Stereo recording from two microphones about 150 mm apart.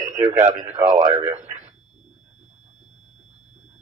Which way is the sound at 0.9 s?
50° right (ahead or behind).